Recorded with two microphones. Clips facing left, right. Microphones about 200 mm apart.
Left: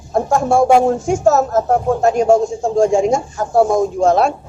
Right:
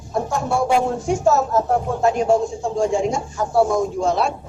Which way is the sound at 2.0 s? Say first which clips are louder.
Left 4 dB; 45° left (ahead or behind).